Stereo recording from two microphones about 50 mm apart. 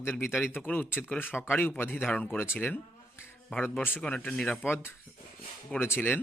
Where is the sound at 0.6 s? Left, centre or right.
Left.